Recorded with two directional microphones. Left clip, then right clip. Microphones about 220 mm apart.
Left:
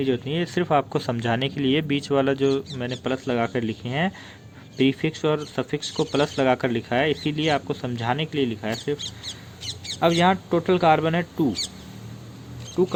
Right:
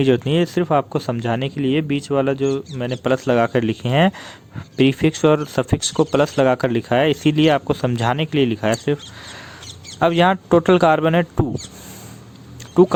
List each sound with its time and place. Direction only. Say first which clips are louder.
0.0 s speech: right 8 dB; 35° right (ahead or behind)
10.0 s speech: right 4 dB; 40° right (ahead or behind)